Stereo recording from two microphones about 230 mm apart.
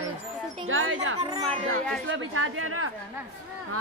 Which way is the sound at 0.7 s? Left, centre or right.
Right.